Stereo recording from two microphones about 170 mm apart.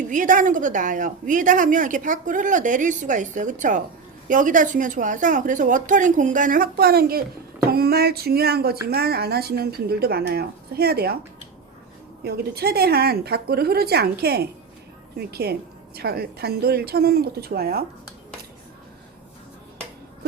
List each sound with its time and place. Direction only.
0.1 s a woman's voice: 50° right (ahead or behind); by 11.2 s 65° right (ahead or behind)
12.2 s a woman's voice: 65° right (ahead or behind)